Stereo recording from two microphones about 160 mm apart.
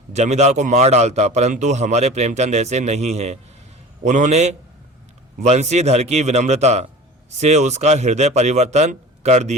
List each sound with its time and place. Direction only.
0.1 s a man's voice: 45° right (ahead or behind)